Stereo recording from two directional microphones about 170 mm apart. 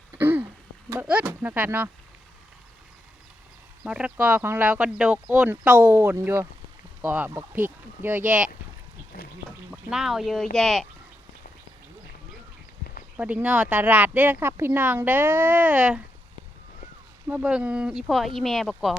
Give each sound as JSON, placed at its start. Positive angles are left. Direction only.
{"t": 0.2, "sound": "throat clearing", "side_deg": -10}
{"t": 0.9, "sound": "speech", "side_deg": -10}
{"t": 3.8, "sound": "speech", "side_deg": -5}
{"t": 9.7, "sound": "speech", "side_deg": -5}
{"t": 13.1, "sound": "speech", "side_deg": -10}
{"t": 17.2, "sound": "speech", "side_deg": -10}